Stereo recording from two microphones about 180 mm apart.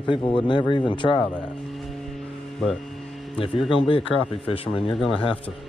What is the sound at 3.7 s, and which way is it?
Speech, 30° left (ahead or behind).